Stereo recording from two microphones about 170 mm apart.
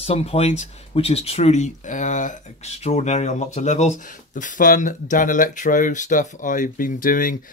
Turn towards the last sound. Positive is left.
turn(degrees=55)  # may be behind; listen again after turning